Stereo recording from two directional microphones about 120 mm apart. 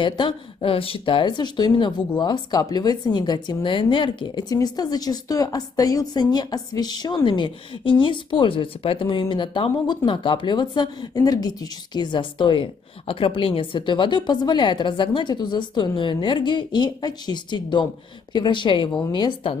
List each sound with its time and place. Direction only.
0.0 s speech: 45° left (ahead or behind)